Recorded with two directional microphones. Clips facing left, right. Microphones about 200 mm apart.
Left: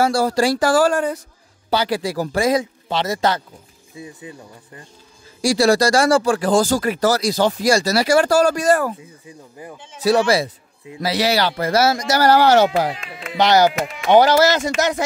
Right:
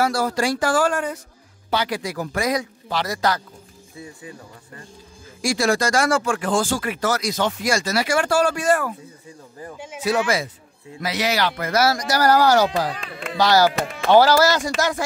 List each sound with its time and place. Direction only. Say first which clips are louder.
0.0 s speech: left 4 dB; 30° left (ahead or behind)
5.4 s speech: left 5 dB; 35° left (ahead or behind)
9.8 s speech: right 7 dB; 10° right (ahead or behind)
10.0 s speech: left 5 dB; 35° left (ahead or behind)
13.1 s speech: right 1 dB; 55° right (ahead or behind)
13.4 s speech: left 2 dB; 20° left (ahead or behind)